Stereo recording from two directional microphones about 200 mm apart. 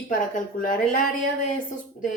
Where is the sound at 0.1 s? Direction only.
40° left (ahead or behind).